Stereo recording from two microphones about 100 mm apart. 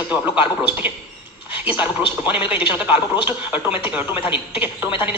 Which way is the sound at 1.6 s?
15° right (ahead or behind).